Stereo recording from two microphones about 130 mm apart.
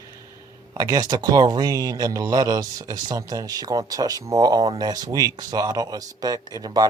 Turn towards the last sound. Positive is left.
turn(degrees=-30)  # may be behind; listen again after turning